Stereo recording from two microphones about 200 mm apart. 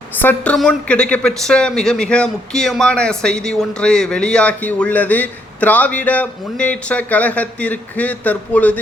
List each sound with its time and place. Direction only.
0.2 s speech: 10° left (ahead or behind)